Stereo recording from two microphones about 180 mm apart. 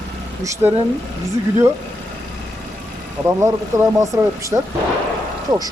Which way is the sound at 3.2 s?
15° right (ahead or behind).